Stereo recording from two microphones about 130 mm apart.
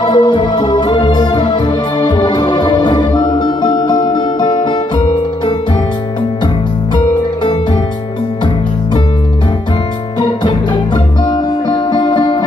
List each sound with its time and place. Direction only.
0.0 s music: 35° left (ahead or behind)
11.2 s music: 35° left (ahead or behind)